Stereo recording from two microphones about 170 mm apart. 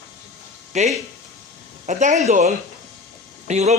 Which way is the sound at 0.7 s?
45° right (ahead or behind).